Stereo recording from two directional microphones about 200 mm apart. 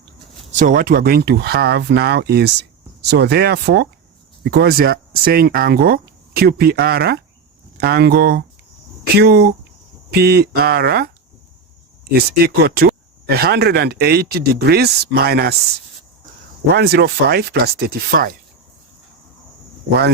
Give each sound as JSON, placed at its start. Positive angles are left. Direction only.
{"t": 0.5, "sound": "speech", "side_deg": -40}
{"t": 12.6, "sound": "speech", "side_deg": -50}
{"t": 16.7, "sound": "speech", "side_deg": -55}